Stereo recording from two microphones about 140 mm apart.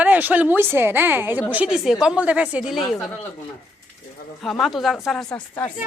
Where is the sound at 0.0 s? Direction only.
10° right (ahead or behind).